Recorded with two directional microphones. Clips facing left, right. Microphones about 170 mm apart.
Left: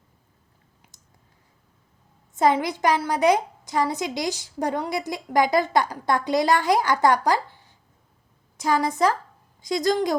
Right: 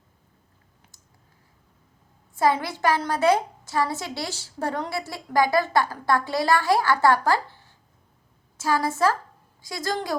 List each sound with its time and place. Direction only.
0.8 s clicking: 15° left (ahead or behind)
2.3 s a woman's voice: 20° left (ahead or behind)